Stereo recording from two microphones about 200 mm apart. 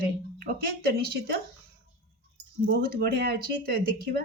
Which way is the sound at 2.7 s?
50° right (ahead or behind).